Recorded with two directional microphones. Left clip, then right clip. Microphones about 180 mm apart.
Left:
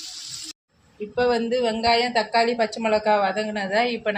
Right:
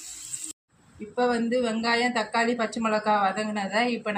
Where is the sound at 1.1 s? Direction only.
50° left (ahead or behind).